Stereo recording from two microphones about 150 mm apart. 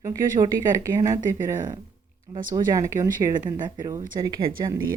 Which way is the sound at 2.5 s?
20° right (ahead or behind).